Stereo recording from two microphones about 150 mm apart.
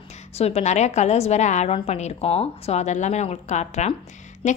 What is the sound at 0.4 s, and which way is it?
A woman's voice, 45° left (ahead or behind).